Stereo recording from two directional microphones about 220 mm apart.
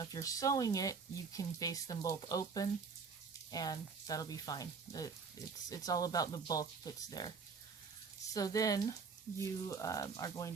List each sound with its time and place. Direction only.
0.0 s speech: 15° left (ahead or behind)